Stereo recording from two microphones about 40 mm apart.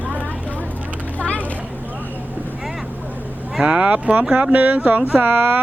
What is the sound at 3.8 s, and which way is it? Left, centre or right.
Speech, right.